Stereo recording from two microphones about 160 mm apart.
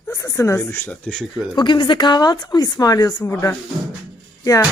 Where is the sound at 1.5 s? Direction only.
30° left (ahead or behind).